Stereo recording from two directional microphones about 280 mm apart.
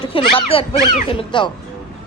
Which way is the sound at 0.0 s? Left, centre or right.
Centre.